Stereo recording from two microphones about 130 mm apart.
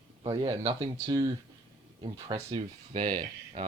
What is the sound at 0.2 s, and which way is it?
Speech, 40° right (ahead or behind).